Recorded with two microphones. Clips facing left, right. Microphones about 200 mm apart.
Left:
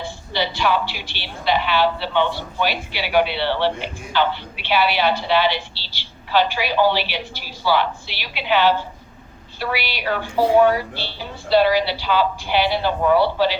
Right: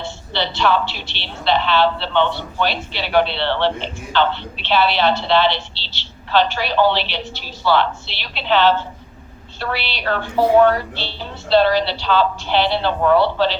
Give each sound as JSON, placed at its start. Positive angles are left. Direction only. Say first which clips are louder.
{"t": 0.0, "sound": "a woman's voice", "louder": "even", "side_deg": 10}